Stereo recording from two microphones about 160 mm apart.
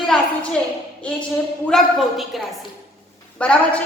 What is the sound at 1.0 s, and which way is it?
A woman's voice, 5° left (ahead or behind).